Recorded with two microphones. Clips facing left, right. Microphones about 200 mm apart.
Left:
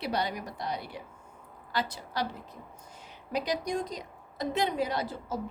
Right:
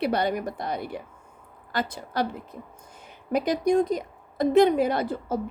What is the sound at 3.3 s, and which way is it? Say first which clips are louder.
A woman's voice: right 8 dB; 50° right (ahead or behind).